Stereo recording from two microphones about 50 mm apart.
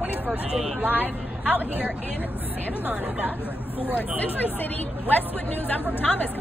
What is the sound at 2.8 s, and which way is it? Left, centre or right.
Speech, right.